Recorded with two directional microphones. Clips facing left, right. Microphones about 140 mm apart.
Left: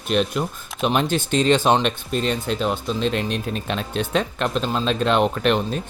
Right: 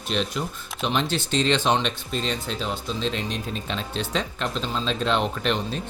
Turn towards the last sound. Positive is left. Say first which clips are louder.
# left 5 dB
turn(degrees=55)  # may be behind; listen again after turning